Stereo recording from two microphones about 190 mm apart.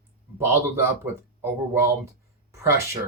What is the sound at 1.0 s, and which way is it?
Speech, 15° right (ahead or behind).